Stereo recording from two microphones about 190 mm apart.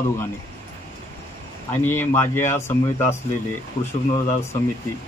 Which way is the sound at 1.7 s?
10° left (ahead or behind).